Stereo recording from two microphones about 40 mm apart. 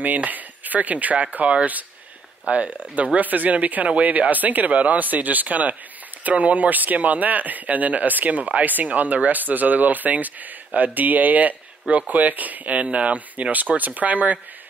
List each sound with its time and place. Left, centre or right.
0.0 s speech: right